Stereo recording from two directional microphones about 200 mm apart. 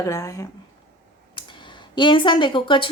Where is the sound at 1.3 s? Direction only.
25° left (ahead or behind).